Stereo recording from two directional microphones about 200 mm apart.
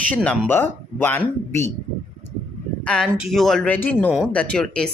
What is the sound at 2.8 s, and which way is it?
Speech, 5° left (ahead or behind).